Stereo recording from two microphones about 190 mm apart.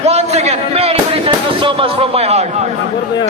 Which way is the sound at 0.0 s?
35° right (ahead or behind).